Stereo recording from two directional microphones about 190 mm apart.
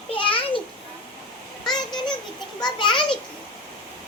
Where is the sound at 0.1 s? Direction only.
30° left (ahead or behind).